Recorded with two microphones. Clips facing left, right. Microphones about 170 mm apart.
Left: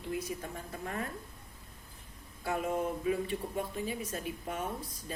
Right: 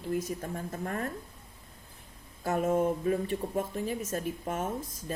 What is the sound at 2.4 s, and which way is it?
A woman's voice, 45° right (ahead or behind).